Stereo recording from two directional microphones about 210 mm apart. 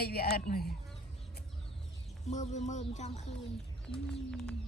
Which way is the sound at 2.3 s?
35° left (ahead or behind).